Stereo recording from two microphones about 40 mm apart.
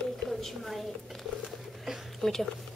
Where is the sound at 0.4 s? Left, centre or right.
Centre.